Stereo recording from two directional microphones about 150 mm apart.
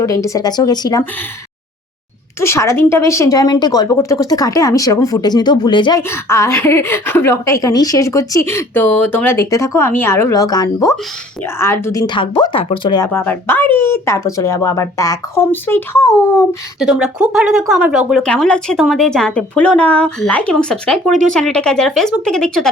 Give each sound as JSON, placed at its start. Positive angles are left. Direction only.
{"t": 0.0, "sound": "a woman's voice", "side_deg": 20}
{"t": 2.4, "sound": "a woman's voice", "side_deg": 20}
{"t": 6.0, "sound": "a woman's voice", "side_deg": 15}
{"t": 13.1, "sound": "a woman's voice", "side_deg": 15}
{"t": 16.8, "sound": "a woman's voice", "side_deg": -5}